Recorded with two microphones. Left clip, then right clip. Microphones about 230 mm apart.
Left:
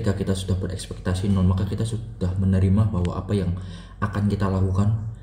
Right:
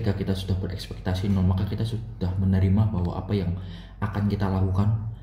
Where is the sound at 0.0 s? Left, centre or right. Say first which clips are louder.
Left 3 dB; centre.